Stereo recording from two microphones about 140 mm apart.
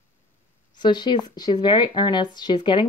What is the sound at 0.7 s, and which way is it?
Speech, 30° left (ahead or behind).